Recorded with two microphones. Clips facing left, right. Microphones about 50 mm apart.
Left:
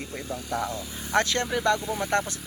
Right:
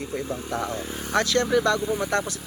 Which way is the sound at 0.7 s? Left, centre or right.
Right.